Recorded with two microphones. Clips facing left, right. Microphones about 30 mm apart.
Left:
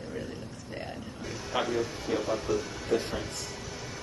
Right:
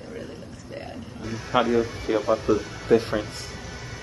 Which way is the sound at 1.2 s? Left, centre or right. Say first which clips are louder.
Right 8 dB; centre.